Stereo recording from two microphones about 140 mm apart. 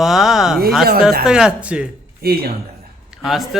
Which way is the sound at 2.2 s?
90° right.